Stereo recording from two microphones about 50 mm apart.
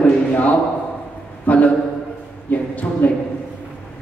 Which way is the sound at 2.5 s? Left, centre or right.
Left.